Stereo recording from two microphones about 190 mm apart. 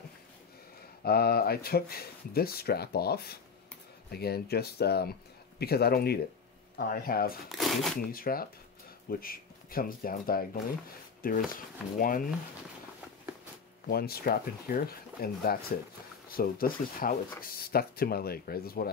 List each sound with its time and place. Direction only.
1.0 s speech: 55° left (ahead or behind)
7.4 s speech: centre (ahead or behind)
8.1 s speech: 50° left (ahead or behind)
13.8 s speech: 55° left (ahead or behind)